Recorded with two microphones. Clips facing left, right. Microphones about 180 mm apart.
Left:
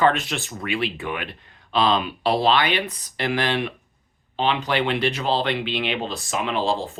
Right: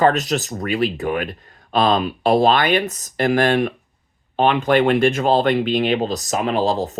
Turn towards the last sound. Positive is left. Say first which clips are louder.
# right 4 dB
turn(degrees=-40)  # may be behind; listen again after turning